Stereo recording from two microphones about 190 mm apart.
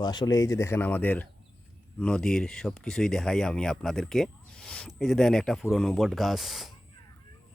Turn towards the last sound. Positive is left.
turn(degrees=0)  # may be behind; listen again after turning